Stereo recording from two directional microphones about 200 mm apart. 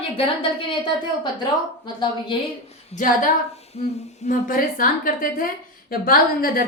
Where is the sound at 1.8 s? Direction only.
20° left (ahead or behind).